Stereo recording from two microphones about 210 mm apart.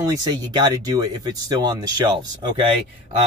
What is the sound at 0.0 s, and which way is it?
Speech, 15° right (ahead or behind).